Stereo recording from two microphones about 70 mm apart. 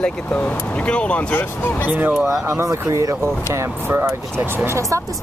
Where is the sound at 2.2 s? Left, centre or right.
Right.